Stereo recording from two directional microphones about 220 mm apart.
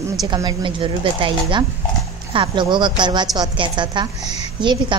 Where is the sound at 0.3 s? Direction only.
20° right (ahead or behind).